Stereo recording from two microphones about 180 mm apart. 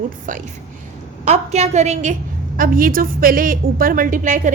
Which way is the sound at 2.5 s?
50° right (ahead or behind).